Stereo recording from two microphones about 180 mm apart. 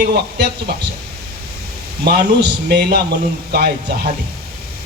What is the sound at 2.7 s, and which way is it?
Speech, 60° right (ahead or behind).